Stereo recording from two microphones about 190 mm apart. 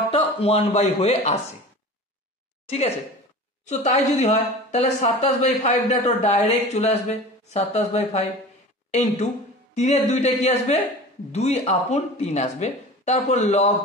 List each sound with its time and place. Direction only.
0.1 s speech: 30° left (ahead or behind)
3.6 s a woman's voice: 35° left (ahead or behind)